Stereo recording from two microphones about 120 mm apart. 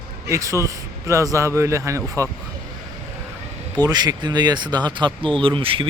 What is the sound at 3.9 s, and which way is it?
Speech, 35° right (ahead or behind).